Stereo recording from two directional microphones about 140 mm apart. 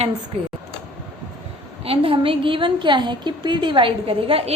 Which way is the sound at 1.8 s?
40° right (ahead or behind).